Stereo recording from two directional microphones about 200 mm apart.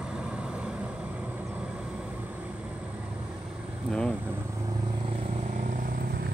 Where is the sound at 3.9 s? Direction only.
5° left (ahead or behind).